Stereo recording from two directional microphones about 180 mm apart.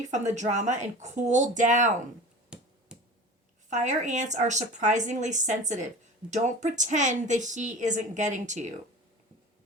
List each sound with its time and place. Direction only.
0.1 s speech: 40° right (ahead or behind)
2.5 s finger snapping: 5° right (ahead or behind)
3.7 s speech: 40° right (ahead or behind)